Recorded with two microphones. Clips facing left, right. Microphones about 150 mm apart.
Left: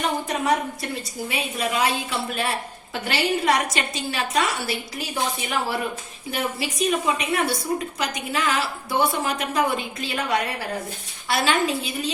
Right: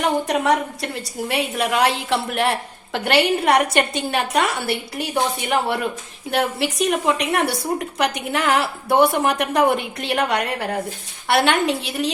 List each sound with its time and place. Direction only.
0.0 s a woman's voice: 75° right (ahead or behind)